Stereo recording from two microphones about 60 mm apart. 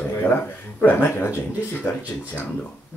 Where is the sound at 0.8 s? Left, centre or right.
Left.